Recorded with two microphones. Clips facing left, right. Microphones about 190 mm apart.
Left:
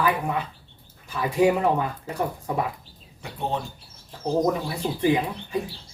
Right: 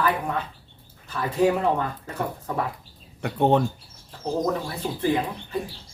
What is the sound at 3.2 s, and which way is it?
Speech, 60° right (ahead or behind).